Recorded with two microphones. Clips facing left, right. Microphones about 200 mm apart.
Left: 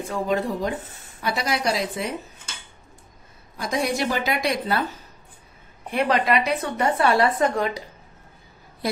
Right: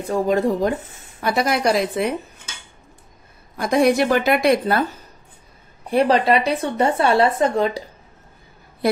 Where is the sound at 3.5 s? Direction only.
55° right (ahead or behind).